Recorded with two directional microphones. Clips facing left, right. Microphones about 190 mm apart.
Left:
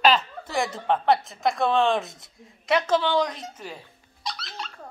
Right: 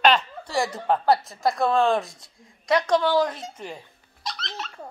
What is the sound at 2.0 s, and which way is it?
Speech, 20° left (ahead or behind).